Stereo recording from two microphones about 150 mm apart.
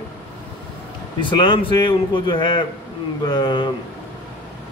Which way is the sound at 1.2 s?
35° left (ahead or behind).